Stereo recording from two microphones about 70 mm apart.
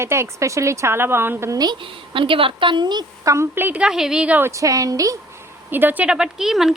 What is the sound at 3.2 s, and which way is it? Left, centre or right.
Speech, right.